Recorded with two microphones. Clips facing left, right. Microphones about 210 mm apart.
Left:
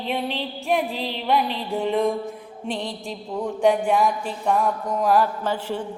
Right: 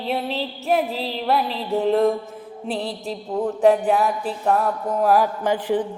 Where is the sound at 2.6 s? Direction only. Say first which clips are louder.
Right 2 dB; 35° right (ahead or behind).